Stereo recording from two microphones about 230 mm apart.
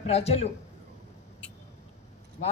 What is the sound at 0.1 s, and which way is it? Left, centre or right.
Speech, left.